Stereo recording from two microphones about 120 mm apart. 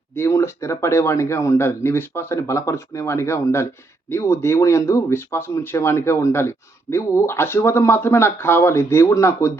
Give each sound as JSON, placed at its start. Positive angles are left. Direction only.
{"t": 0.1, "sound": "speech", "side_deg": 20}